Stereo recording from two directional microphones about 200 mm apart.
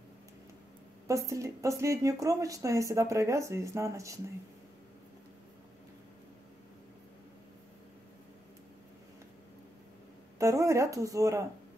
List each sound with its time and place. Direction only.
1.0 s speech: 15° right (ahead or behind)
10.4 s speech: 15° right (ahead or behind)